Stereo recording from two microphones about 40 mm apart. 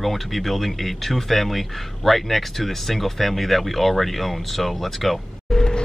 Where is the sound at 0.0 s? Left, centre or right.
Centre.